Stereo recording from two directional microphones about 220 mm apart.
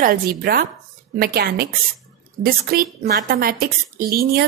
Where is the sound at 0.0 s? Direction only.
40° right (ahead or behind).